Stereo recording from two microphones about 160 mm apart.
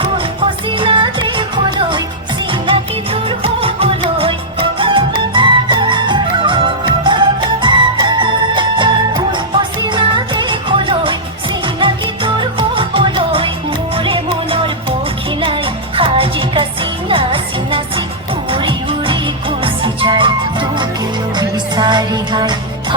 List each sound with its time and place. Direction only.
0.8 s music: 30° right (ahead or behind)
3.2 s music: 35° right (ahead or behind)
16.0 s music: 35° right (ahead or behind)